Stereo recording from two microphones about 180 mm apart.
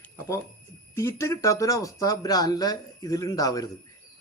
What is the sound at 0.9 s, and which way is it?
Speech, 15° left (ahead or behind).